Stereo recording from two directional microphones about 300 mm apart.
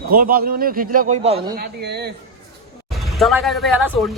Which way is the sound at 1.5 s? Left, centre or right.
Right.